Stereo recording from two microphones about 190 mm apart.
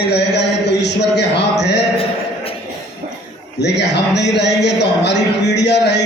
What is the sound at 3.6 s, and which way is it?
Speech, 65° left (ahead or behind).